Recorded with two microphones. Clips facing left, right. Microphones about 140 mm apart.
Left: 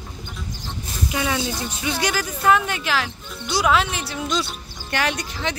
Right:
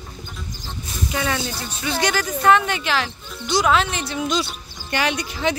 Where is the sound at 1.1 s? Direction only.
5° left (ahead or behind).